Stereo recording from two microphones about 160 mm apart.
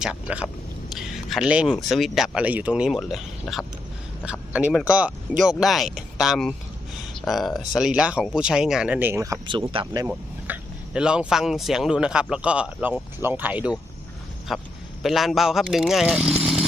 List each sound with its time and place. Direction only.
0.0 s speech: 5° right (ahead or behind)
9.5 s speech: 35° right (ahead or behind)
9.8 s speech: 20° right (ahead or behind)
10.1 s speech: 10° right (ahead or behind)